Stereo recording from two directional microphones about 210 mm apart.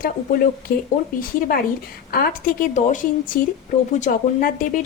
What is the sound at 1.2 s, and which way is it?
Speech, 45° left (ahead or behind).